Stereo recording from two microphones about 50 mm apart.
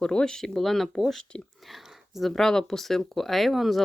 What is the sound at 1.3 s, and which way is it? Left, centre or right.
Speech, centre.